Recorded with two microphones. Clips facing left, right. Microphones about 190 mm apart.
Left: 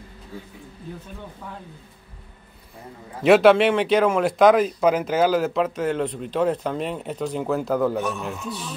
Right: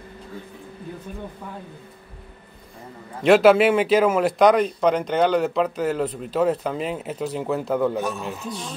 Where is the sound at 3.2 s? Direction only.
Centre (ahead or behind).